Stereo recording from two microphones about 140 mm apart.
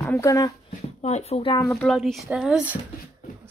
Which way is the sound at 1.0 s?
50° left (ahead or behind).